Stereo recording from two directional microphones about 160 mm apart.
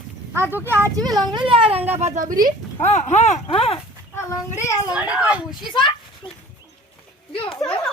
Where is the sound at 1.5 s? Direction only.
35° right (ahead or behind).